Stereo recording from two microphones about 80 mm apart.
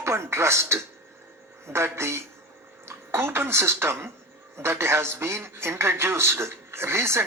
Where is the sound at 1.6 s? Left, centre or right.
Right.